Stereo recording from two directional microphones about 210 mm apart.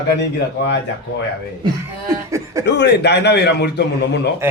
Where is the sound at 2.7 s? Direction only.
55° left (ahead or behind).